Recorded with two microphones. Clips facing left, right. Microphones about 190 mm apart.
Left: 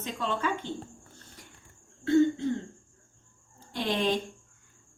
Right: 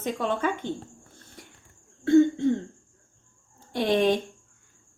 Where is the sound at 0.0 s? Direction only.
55° right (ahead or behind).